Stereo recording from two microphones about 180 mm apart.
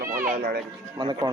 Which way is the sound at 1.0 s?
25° right (ahead or behind).